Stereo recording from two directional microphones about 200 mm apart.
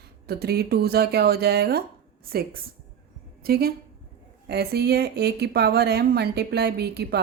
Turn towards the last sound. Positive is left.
turn(degrees=-55)  # may be behind; listen again after turning